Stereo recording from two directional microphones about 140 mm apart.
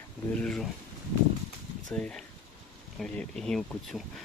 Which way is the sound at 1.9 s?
5° left (ahead or behind).